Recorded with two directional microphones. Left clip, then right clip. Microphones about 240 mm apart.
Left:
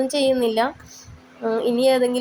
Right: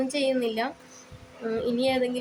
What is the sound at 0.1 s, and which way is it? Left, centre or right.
A woman's voice, centre.